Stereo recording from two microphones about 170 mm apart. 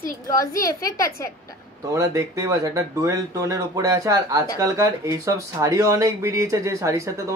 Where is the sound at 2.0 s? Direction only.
20° right (ahead or behind).